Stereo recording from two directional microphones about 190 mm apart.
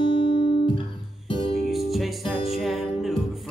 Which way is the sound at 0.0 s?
25° left (ahead or behind).